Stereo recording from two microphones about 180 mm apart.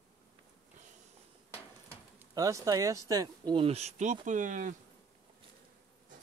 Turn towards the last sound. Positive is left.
turn(degrees=-45)  # may be behind; listen again after turning